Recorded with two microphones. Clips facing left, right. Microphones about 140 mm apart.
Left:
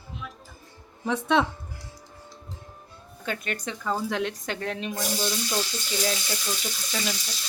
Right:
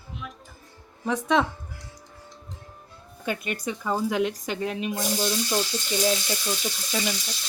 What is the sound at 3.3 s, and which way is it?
Speech, 10° right (ahead or behind).